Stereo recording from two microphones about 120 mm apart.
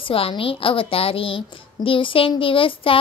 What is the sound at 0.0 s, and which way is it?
A woman's voice, 50° left (ahead or behind).